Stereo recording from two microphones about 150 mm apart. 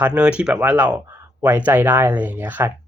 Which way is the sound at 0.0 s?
5° right (ahead or behind).